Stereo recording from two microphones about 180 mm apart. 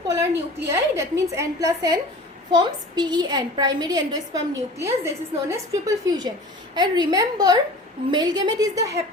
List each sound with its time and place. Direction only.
0.7 s a woman's voice: 15° right (ahead or behind)